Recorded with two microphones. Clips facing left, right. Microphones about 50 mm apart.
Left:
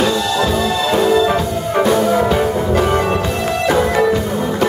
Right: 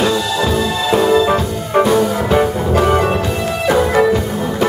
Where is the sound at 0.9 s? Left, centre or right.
Centre.